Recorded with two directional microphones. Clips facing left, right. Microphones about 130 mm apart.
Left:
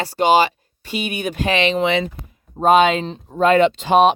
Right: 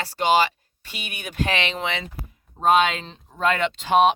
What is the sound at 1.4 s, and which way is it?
Speech, centre (ahead or behind).